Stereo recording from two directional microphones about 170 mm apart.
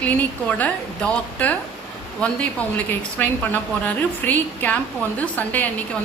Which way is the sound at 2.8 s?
10° left (ahead or behind).